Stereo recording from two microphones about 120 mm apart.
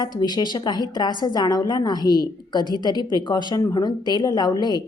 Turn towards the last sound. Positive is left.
turn(degrees=35)  # may be behind; listen again after turning